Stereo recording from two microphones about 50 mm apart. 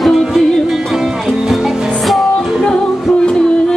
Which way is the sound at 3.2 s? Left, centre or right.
Centre.